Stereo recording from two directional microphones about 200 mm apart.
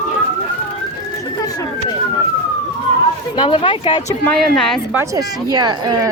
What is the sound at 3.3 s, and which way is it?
Speech, 25° left (ahead or behind).